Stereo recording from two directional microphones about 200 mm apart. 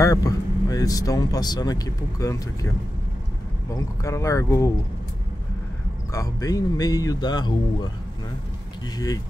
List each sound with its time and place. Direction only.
0.0 s speech: 15° left (ahead or behind)
3.7 s speech: 15° left (ahead or behind)
6.1 s a man's voice: 15° left (ahead or behind)
8.9 s a man's voice: 20° left (ahead or behind)